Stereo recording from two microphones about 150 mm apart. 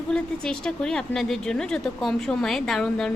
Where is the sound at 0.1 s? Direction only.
5° left (ahead or behind).